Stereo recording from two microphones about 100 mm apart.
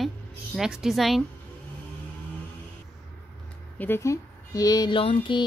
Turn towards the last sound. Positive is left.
turn(degrees=60)  # may be behind; listen again after turning